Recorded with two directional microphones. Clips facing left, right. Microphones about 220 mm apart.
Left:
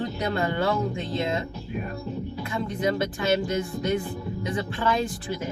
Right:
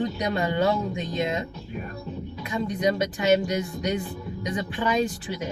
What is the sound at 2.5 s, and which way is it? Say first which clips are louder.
Speech: right 2 dB; 15° right (ahead or behind).